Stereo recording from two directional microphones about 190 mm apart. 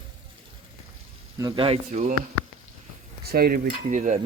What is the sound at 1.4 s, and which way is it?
Speech, 25° right (ahead or behind).